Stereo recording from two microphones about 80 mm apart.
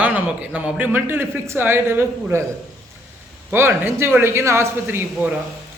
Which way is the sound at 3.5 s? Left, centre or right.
Right.